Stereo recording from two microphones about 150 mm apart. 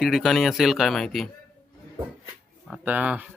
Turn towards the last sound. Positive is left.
turn(degrees=-10)  # may be behind; listen again after turning